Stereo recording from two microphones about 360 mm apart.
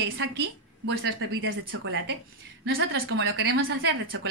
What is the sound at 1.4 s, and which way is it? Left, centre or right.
Speech, right.